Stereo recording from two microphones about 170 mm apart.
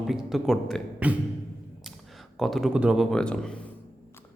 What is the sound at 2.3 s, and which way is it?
Speech, centre (ahead or behind).